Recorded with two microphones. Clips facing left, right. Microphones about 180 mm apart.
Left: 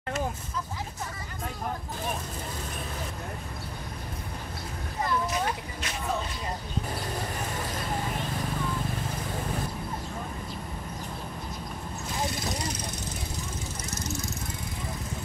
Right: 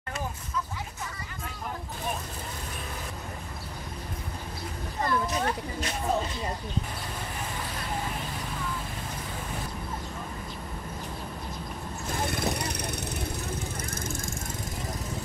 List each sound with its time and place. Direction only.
12.1 s vehicle: 55° right (ahead or behind)
13.8 s vehicle: 50° right (ahead or behind)